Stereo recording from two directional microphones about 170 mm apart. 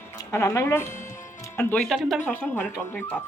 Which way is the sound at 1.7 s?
Centre (ahead or behind).